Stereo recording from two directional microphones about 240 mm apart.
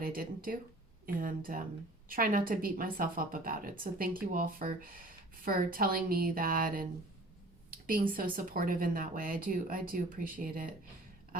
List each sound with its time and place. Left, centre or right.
0.0 s a woman's voice: right
8.1 s a woman's voice: right